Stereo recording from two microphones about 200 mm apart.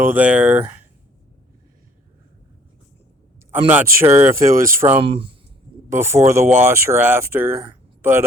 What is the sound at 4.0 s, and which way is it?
Speech, 10° right (ahead or behind).